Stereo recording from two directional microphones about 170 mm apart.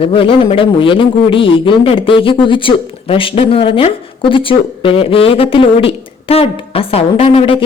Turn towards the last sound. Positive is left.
turn(degrees=30)  # may be behind; listen again after turning